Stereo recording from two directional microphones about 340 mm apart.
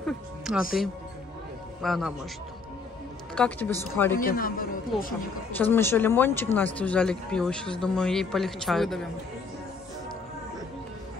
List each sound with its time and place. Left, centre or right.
0.0 s music: centre
1.8 s speech: centre
3.3 s speech: centre
4.2 s a man's voice: left
5.5 s speech: centre